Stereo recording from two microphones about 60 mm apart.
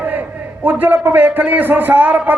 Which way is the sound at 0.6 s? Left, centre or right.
Right.